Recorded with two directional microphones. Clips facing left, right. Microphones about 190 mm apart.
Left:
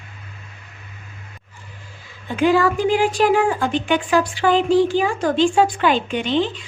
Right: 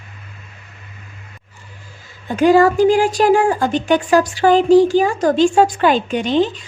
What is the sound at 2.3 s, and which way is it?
A woman's voice, 40° right (ahead or behind).